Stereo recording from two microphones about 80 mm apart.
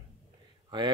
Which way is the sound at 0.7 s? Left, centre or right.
Right.